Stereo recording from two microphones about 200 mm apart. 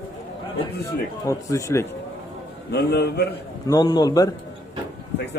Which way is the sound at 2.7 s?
55° left (ahead or behind).